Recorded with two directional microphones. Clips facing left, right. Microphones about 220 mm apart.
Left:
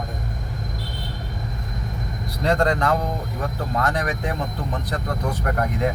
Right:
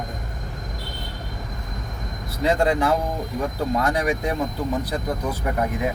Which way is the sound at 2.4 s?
5° right (ahead or behind).